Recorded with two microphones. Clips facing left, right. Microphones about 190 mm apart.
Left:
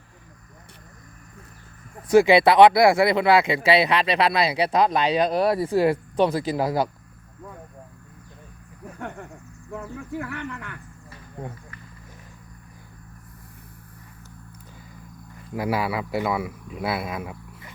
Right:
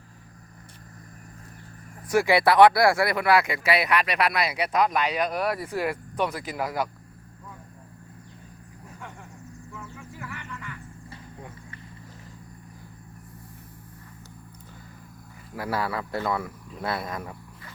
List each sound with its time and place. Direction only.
2.0 s speech: 20° left (ahead or behind)
9.0 s vehicle: 60° left (ahead or behind)
9.9 s speech: 60° left (ahead or behind)
15.5 s speech: 15° left (ahead or behind)